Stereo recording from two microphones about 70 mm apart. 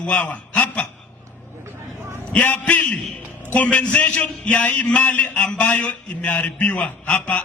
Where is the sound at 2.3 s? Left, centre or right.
Left.